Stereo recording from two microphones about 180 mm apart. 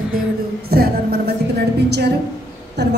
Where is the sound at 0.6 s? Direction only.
60° right (ahead or behind).